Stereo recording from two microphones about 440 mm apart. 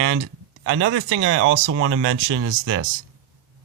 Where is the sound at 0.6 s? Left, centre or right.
Right.